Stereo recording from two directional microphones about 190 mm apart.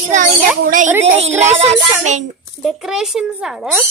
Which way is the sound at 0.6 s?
45° right (ahead or behind).